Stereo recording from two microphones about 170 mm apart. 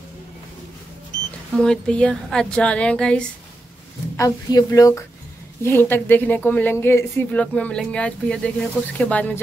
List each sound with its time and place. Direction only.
1.6 s speech: 5° left (ahead or behind)
4.2 s a woman's voice: 20° left (ahead or behind)